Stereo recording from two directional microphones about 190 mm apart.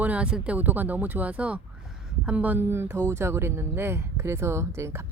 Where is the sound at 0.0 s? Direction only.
5° right (ahead or behind).